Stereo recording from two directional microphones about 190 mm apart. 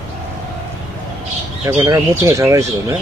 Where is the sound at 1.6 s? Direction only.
15° right (ahead or behind).